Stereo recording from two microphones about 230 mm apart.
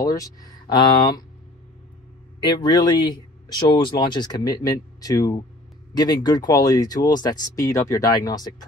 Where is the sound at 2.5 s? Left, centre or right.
Centre.